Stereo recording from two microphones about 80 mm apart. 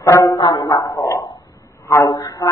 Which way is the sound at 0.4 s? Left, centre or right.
Left.